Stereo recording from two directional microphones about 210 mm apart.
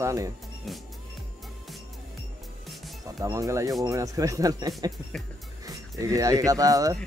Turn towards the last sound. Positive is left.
turn(degrees=-15)  # may be behind; listen again after turning